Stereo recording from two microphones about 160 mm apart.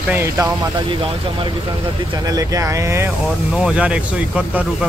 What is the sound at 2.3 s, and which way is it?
Speech, 20° right (ahead or behind).